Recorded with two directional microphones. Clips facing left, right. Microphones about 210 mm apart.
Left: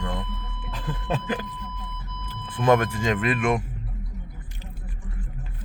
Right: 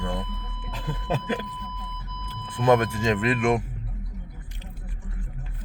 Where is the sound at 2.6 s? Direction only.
25° right (ahead or behind).